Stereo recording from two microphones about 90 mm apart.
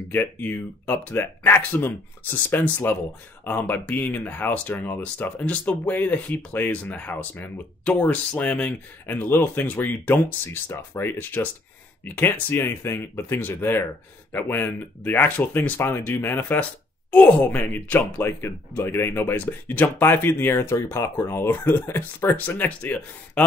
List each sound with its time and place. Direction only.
0.1 s speech: 20° left (ahead or behind)